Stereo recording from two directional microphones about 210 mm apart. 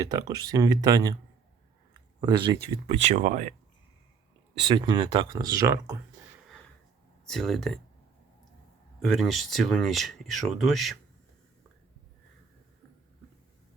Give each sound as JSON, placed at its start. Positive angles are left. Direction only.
{"t": 0.0, "sound": "speech", "side_deg": -15}
{"t": 1.9, "sound": "a sound", "side_deg": -20}
{"t": 2.8, "sound": "speech", "side_deg": -30}
{"t": 4.6, "sound": "speech", "side_deg": -25}
{"t": 7.3, "sound": "speech", "side_deg": 0}
{"t": 9.0, "sound": "speech", "side_deg": 0}